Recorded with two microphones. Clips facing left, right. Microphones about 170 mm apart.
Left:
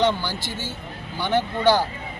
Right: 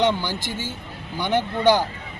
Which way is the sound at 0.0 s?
15° right (ahead or behind).